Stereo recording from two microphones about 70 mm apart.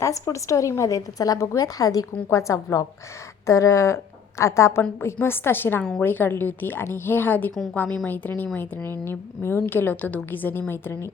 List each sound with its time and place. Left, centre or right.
0.0 s speech: left
2.3 s a woman's voice: left
4.9 s a woman's voice: left